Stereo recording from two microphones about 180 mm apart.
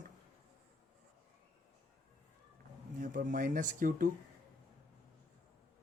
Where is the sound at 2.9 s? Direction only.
50° right (ahead or behind).